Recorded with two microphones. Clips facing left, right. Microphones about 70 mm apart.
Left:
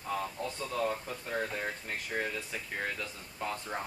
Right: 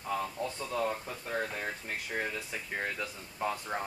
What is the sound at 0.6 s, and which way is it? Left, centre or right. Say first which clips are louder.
Speech: left 1 dB; centre.